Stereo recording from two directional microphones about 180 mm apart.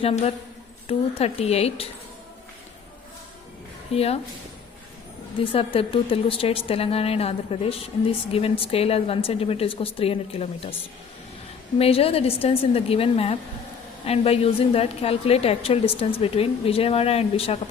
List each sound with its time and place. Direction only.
0.0 s a woman's voice: 35° left (ahead or behind)
3.9 s a woman's voice: 35° left (ahead or behind)
5.4 s a woman's voice: 30° left (ahead or behind)
11.8 s a woman's voice: 30° left (ahead or behind)